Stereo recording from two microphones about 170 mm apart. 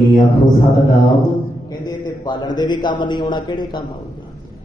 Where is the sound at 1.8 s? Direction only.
25° left (ahead or behind).